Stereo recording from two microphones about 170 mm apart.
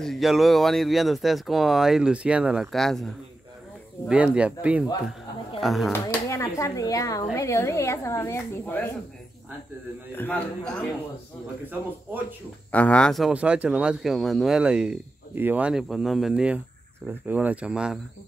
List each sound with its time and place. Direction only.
0.0 s speech: centre (ahead or behind)
4.1 s speech: 5° right (ahead or behind)
5.9 s a woman's voice: 15° left (ahead or behind)
10.1 s a woman's voice: 10° left (ahead or behind)
12.7 s speech: 5° left (ahead or behind)